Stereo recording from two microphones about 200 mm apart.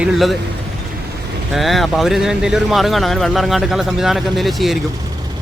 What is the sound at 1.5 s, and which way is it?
Speech, centre (ahead or behind).